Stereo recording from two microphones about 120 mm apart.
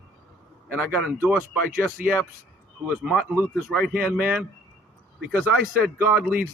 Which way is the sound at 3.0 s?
5° right (ahead or behind).